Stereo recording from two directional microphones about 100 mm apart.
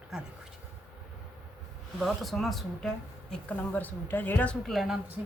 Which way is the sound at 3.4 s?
15° left (ahead or behind).